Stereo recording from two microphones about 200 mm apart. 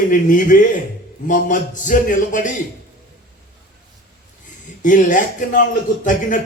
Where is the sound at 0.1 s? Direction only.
40° left (ahead or behind).